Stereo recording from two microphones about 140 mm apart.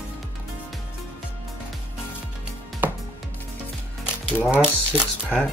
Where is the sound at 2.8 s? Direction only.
15° right (ahead or behind).